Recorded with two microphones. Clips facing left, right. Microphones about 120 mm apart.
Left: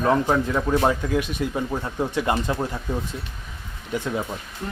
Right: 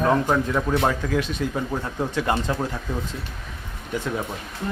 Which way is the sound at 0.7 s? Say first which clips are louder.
Left 2 dB; 15° left (ahead or behind).